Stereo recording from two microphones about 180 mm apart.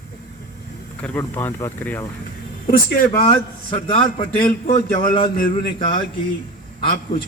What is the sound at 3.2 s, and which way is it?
A man's voice, 30° left (ahead or behind).